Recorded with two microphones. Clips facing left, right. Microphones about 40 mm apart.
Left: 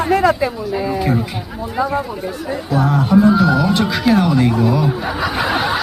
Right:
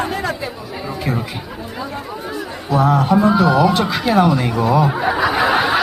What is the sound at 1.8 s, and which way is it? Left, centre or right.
Speech, left.